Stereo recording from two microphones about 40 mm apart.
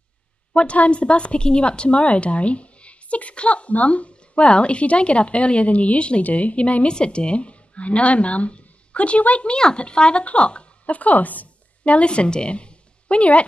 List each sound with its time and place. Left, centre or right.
0.7 s a woman's voice: left
9.6 s a woman's voice: left
11.8 s a woman's voice: left